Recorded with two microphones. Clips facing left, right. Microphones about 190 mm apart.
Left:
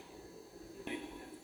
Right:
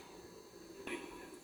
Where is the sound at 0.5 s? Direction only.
30° left (ahead or behind).